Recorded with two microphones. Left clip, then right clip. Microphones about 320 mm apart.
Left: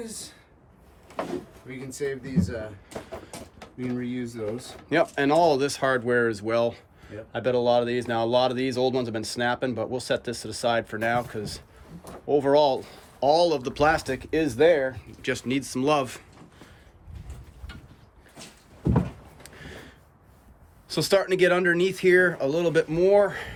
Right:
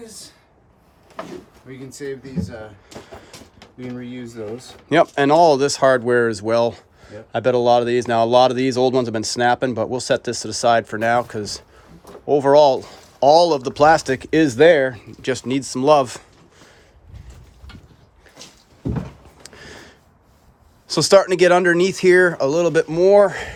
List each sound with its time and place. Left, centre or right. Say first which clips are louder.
3.6 s speech: left 1 dB; centre
19.4 s a sound: right 6 dB; centre
20.8 s speech: right 9 dB; centre